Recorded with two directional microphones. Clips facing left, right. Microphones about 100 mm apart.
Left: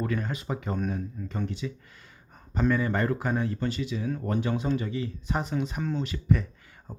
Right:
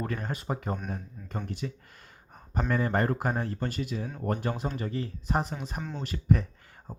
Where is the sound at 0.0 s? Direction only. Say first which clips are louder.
Left 3 dB; 40° right (ahead or behind).